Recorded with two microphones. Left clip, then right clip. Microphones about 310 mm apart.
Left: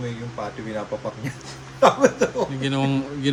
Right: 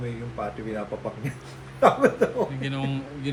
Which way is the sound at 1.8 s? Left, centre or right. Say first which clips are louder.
Left 3 dB; left.